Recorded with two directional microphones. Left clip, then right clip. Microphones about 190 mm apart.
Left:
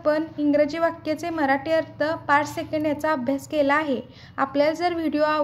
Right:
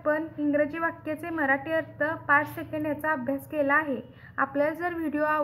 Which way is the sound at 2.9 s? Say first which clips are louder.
Left 4 dB; 30° left (ahead or behind).